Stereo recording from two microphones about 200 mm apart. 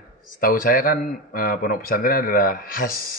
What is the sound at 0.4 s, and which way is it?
A man's voice, 45° left (ahead or behind).